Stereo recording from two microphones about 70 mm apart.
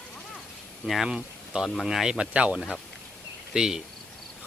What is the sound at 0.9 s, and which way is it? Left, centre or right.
Speech, centre.